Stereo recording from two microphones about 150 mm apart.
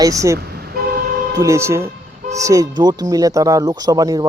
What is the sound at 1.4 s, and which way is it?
Speech, 20° right (ahead or behind).